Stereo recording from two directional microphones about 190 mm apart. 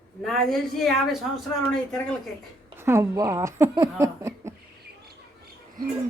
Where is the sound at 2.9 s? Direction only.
15° right (ahead or behind).